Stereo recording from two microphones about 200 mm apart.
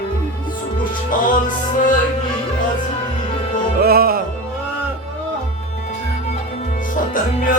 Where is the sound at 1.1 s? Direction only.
40° left (ahead or behind).